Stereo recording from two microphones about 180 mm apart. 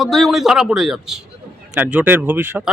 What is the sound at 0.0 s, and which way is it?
Speech, centre (ahead or behind).